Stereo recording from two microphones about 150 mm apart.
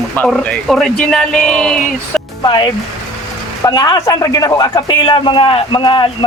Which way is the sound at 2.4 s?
30° left (ahead or behind).